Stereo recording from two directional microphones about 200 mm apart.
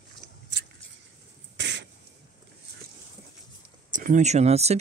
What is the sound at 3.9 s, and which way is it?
Speech, 40° right (ahead or behind).